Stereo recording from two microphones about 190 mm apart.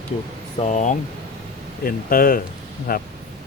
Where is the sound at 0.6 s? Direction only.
40° left (ahead or behind).